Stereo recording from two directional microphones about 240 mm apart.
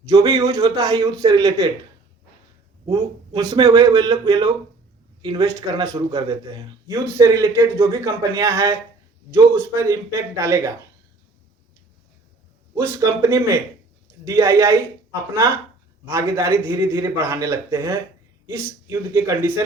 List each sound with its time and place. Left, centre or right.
0.1 s a man's voice: centre
2.8 s a man's voice: centre
12.7 s a man's voice: centre
16.0 s a man's voice: centre